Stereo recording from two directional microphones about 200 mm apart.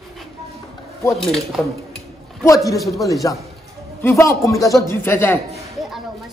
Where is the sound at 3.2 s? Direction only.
15° left (ahead or behind).